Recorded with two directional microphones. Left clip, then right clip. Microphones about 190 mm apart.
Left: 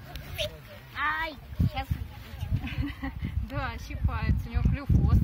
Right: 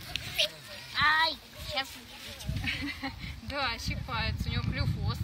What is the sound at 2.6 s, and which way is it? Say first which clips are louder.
Speech: right 4 dB; 25° left (ahead or behind).